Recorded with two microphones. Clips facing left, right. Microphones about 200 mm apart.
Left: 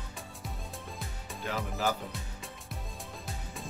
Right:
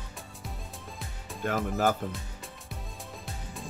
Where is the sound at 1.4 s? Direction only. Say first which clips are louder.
Right 6 dB; 50° right (ahead or behind).